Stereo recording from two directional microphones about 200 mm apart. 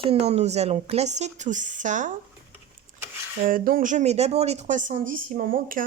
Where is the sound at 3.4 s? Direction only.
45° right (ahead or behind).